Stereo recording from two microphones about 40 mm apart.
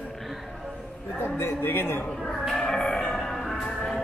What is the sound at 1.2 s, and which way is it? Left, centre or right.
Speech, left.